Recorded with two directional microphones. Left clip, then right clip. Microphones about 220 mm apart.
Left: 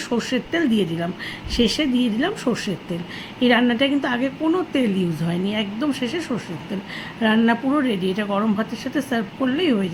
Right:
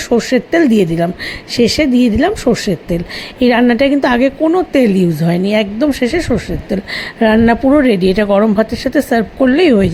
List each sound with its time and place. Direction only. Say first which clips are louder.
0.1 s a woman's voice: right 12 dB; 30° right (ahead or behind)